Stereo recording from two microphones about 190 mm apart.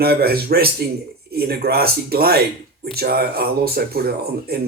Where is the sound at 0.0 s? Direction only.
55° right (ahead or behind).